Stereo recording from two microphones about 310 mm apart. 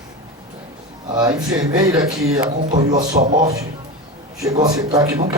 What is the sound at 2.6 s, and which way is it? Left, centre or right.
Speech, right.